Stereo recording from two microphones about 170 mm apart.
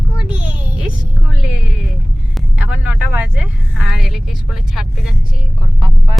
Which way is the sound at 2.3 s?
5° right (ahead or behind).